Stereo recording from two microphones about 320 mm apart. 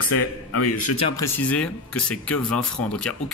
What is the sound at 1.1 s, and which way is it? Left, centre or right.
Speech, centre.